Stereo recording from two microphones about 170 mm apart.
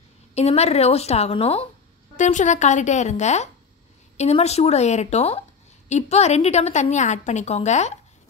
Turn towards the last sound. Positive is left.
turn(degrees=40)  # may be behind; listen again after turning